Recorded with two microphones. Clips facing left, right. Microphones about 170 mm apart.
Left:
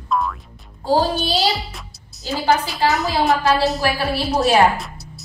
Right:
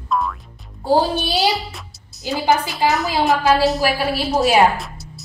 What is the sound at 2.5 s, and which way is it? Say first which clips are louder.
Speech: even; 20° right (ahead or behind).